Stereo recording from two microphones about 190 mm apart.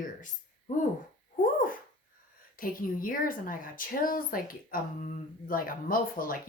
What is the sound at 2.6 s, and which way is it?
A woman's voice, 45° left (ahead or behind).